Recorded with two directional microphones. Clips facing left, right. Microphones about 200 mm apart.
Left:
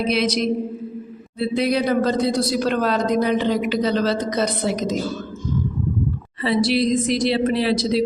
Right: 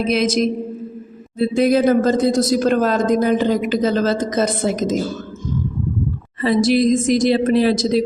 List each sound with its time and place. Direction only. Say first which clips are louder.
0.0 s speech: right 3 dB; 45° right (ahead or behind)
6.4 s speech: right 4 dB; 45° right (ahead or behind)